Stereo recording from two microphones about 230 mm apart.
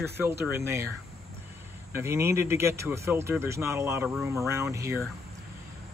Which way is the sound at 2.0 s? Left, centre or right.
Centre.